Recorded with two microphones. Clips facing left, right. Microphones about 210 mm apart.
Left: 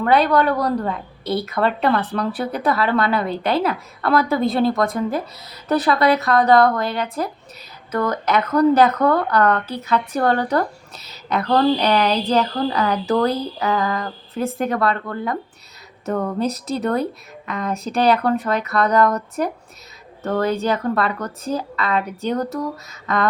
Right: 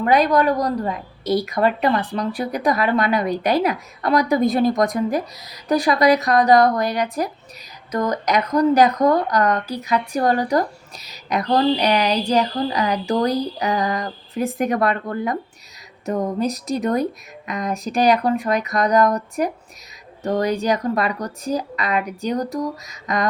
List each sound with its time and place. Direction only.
0.3 s speech: 10° right (ahead or behind)